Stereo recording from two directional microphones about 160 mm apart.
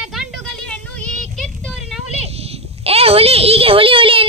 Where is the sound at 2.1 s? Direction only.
40° right (ahead or behind).